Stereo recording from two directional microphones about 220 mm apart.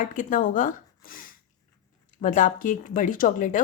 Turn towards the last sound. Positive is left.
turn(degrees=35)  # may be behind; listen again after turning